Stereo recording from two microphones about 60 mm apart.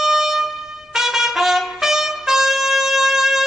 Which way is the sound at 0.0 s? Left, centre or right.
Centre.